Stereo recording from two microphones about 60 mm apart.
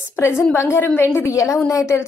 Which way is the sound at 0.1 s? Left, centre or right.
Left.